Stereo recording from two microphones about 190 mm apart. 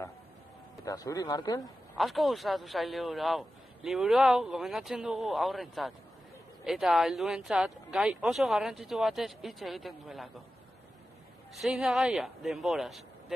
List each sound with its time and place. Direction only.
0.8 s a man's voice: 20° left (ahead or behind)
1.6 s a man's voice: centre (ahead or behind)
11.6 s a man's voice: centre (ahead or behind)